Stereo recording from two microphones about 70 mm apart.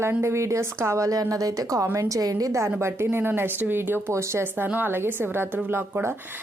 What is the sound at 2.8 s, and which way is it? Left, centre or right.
A woman's voice, right.